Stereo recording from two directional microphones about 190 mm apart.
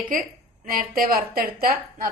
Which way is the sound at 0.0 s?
50° right (ahead or behind).